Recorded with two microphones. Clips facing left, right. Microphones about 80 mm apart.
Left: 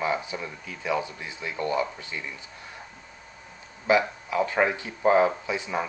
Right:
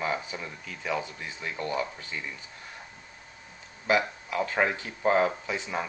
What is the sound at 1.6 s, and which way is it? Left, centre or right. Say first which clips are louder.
Speech: left 5 dB; centre.